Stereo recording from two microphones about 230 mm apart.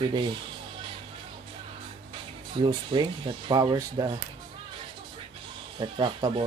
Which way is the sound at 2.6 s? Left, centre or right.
Centre.